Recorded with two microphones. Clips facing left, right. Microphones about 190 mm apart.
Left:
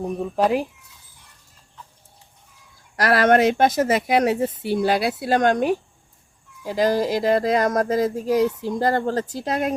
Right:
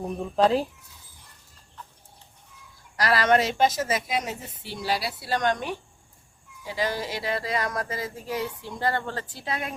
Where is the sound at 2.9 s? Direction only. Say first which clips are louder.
Left 5 dB; 55° left (ahead or behind).